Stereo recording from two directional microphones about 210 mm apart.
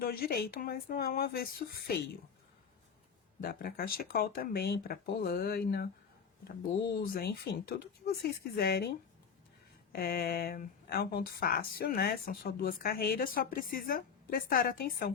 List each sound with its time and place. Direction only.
0.0 s speech: 45° left (ahead or behind)
3.4 s speech: 45° left (ahead or behind)